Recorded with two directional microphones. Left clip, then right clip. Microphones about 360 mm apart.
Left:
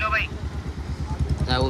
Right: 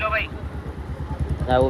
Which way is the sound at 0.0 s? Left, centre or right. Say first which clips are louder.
Even; centre.